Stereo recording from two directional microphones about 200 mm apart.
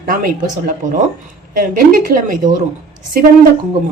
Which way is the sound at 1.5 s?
45° right (ahead or behind).